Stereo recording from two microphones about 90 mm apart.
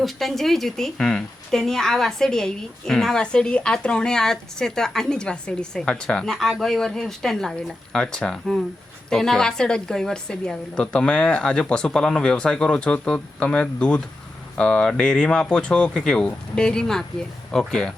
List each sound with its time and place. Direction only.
0.0 s speech: centre (ahead or behind)